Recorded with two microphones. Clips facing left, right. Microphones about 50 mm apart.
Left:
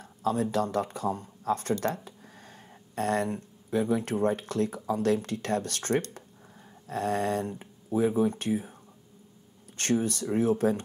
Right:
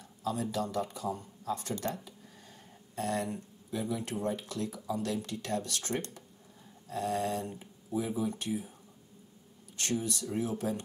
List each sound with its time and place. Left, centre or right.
0.0 s speech: left
9.8 s speech: left